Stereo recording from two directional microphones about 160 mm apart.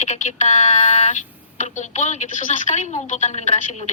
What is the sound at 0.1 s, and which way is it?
A woman's voice, 45° left (ahead or behind).